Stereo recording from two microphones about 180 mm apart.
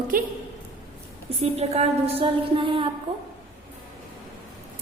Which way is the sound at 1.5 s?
35° right (ahead or behind).